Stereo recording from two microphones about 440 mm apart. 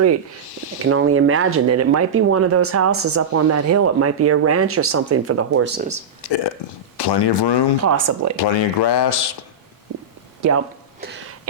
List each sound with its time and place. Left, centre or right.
0.9 s speech: right
6.2 s speech: left
7.9 s speech: right
8.4 s speech: left